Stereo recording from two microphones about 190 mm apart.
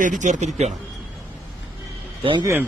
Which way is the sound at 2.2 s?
25° right (ahead or behind).